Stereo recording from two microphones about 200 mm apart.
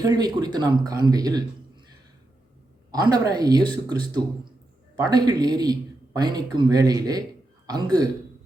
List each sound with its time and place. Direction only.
0.0 s speech: 20° right (ahead or behind)
2.9 s speech: 20° right (ahead or behind)